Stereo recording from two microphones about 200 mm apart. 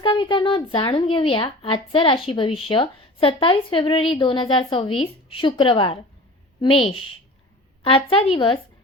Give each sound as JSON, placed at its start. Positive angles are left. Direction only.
{"t": 0.0, "sound": "speech", "side_deg": 25}